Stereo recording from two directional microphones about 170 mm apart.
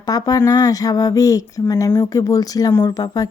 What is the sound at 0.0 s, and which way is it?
Speech, 20° left (ahead or behind).